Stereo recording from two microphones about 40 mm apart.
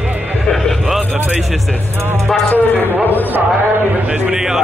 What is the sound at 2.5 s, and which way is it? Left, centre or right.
Speech, left.